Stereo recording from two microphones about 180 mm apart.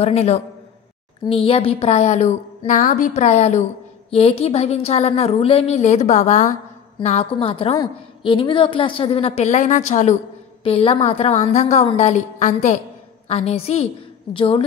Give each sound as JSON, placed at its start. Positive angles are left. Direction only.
{"t": 0.0, "sound": "a woman's voice", "side_deg": 35}